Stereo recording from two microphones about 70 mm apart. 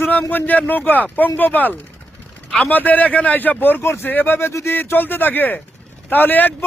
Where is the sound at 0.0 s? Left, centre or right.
Left.